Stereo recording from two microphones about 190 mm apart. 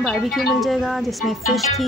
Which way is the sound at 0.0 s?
Centre (ahead or behind).